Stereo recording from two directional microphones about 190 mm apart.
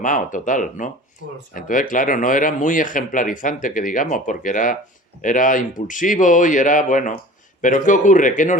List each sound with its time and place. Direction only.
0.0 s speech: 45° left (ahead or behind)